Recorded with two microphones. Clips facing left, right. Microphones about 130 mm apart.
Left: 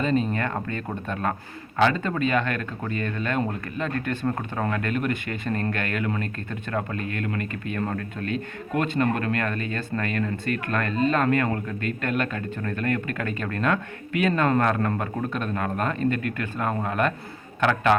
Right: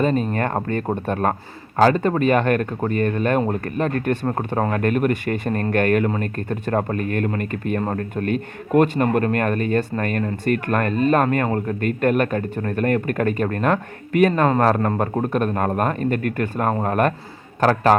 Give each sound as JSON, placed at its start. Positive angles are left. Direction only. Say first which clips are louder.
{"t": 0.0, "sound": "speech", "louder": "right 4 dB", "side_deg": -50}
{"t": 2.0, "sound": "speech", "louder": "right 7 dB", "side_deg": -50}
{"t": 4.3, "sound": "speech", "louder": "right 5 dB", "side_deg": -35}
{"t": 4.7, "sound": "speech", "louder": "right 7 dB", "side_deg": -50}
{"t": 8.7, "sound": "speech", "louder": "right 7 dB", "side_deg": -50}
{"t": 14.6, "sound": "speech", "louder": "right 5 dB", "side_deg": -35}